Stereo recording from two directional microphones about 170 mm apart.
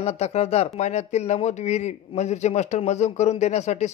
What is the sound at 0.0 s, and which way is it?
Speech, 40° left (ahead or behind).